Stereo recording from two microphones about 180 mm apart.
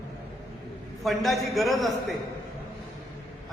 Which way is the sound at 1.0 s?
Centre (ahead or behind).